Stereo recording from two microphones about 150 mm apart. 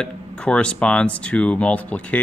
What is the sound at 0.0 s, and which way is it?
Speech, 5° left (ahead or behind).